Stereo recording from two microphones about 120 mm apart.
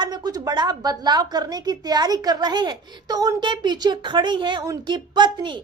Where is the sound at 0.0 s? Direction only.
35° right (ahead or behind).